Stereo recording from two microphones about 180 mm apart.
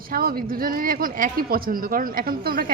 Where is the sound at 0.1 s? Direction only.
55° right (ahead or behind).